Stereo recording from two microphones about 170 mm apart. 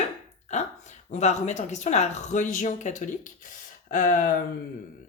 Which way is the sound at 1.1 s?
40° left (ahead or behind).